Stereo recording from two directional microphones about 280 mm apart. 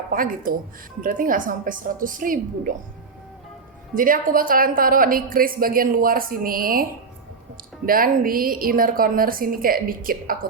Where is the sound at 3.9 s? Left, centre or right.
Right.